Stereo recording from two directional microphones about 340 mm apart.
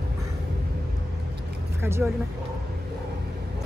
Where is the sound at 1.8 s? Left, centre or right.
Centre.